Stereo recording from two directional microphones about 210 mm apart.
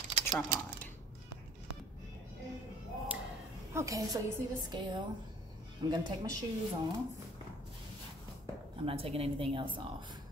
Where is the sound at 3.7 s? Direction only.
15° right (ahead or behind).